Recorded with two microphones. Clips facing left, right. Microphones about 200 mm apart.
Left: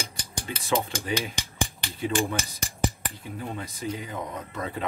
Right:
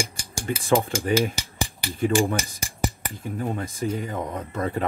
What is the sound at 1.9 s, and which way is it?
Speech, 50° right (ahead or behind).